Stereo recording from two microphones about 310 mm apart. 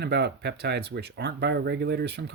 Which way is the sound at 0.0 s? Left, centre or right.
Right.